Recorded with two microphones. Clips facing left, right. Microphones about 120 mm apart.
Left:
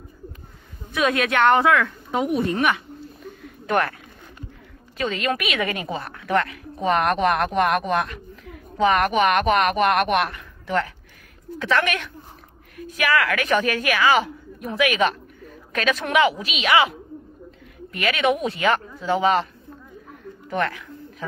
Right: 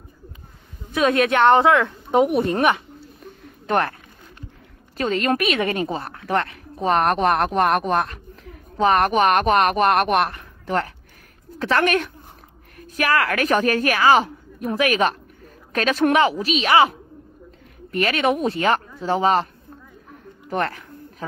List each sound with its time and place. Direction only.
0.9 s a woman's voice: 25° right (ahead or behind)
2.5 s speech: 40° right (ahead or behind)
4.9 s a woman's voice: 40° right (ahead or behind)
17.9 s speech: 40° right (ahead or behind)
20.4 s speech: 40° right (ahead or behind)